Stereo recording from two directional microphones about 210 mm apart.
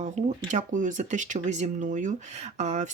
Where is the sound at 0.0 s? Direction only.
35° right (ahead or behind).